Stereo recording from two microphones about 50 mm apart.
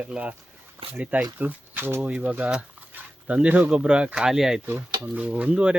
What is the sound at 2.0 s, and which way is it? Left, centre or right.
Speech, right.